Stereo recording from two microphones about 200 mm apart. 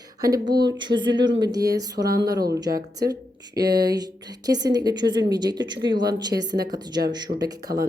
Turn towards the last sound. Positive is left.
turn(degrees=-20)  # may be behind; listen again after turning